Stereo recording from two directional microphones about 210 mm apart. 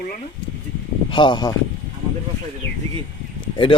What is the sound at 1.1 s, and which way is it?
Speech, 25° left (ahead or behind).